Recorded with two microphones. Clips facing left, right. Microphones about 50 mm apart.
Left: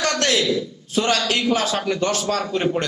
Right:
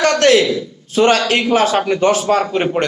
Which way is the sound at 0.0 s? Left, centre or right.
Right.